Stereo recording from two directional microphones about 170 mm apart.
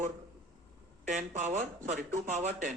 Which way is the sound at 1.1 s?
50° right (ahead or behind).